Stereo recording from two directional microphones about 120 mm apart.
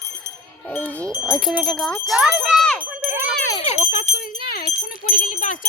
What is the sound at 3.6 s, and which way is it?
Jingle bell, 60° left (ahead or behind).